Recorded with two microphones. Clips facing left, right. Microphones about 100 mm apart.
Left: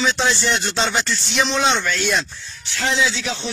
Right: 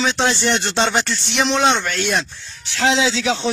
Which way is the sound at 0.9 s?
55° right (ahead or behind).